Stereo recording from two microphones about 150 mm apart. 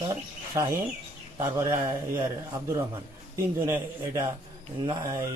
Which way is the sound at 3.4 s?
15° right (ahead or behind).